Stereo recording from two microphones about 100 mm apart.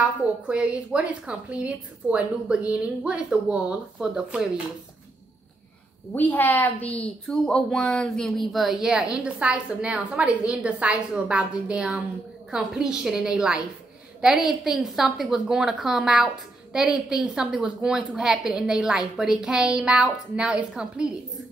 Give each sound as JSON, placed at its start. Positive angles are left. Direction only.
{"t": 0.0, "sound": "speech", "side_deg": -10}
{"t": 6.1, "sound": "a woman's voice", "side_deg": 20}
{"t": 14.6, "sound": "a woman's voice", "side_deg": -5}